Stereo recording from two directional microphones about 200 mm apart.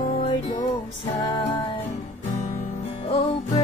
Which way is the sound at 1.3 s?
20° left (ahead or behind).